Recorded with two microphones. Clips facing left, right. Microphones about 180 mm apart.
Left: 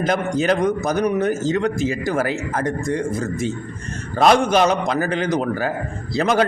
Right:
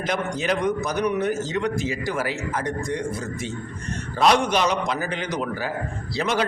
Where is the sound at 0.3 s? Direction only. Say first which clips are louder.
Left 5 dB; 45° left (ahead or behind).